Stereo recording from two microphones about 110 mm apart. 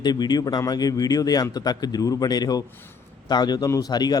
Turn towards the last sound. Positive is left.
turn(degrees=35)  # may be behind; listen again after turning